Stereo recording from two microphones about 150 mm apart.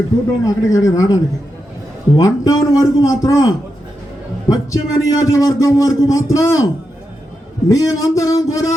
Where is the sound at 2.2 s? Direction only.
25° left (ahead or behind).